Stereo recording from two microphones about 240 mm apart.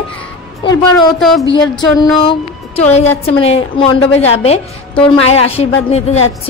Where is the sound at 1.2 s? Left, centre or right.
Centre.